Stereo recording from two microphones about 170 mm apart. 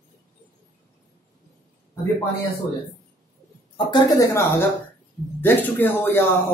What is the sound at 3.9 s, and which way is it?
Speech, 25° left (ahead or behind).